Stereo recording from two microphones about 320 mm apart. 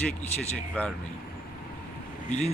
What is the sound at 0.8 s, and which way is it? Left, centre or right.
Speech, centre.